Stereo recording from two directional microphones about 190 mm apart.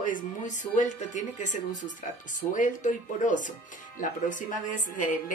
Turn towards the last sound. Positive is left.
turn(degrees=45)  # may be behind; listen again after turning